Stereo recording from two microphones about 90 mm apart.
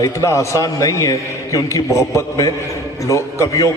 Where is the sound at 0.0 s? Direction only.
35° left (ahead or behind).